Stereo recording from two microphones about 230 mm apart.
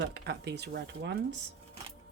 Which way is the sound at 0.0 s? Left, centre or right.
Right.